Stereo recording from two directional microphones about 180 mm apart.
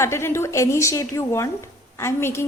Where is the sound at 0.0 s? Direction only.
15° left (ahead or behind).